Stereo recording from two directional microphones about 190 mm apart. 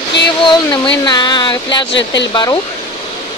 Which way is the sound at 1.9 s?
70° left (ahead or behind).